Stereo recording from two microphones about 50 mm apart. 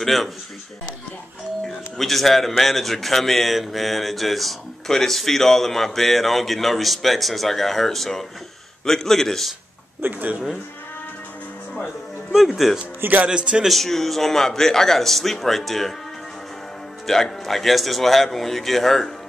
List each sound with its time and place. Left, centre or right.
0.0 s a man's voice: centre
2.0 s a man's voice: centre
10.0 s speech: right
12.3 s a man's voice: centre
13.2 s a man's voice: right
13.7 s a man's voice: centre
17.0 s a man's voice: centre